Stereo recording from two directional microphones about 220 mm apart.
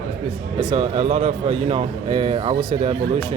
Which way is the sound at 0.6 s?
20° right (ahead or behind).